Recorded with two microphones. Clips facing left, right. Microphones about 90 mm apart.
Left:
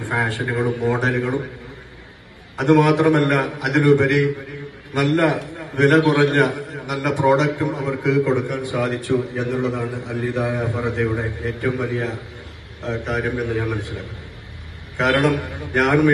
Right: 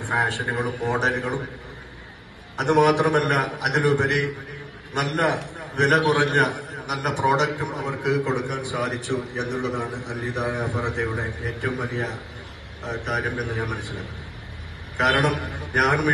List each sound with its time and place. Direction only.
0.0 s a man's voice: 20° right (ahead or behind)
2.6 s a man's voice: 20° right (ahead or behind)